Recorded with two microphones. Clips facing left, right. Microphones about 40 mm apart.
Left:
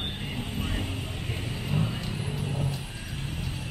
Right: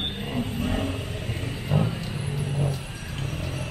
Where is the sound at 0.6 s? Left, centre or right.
Centre.